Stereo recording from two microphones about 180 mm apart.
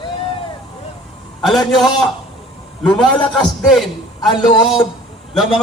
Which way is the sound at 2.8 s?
25° left (ahead or behind).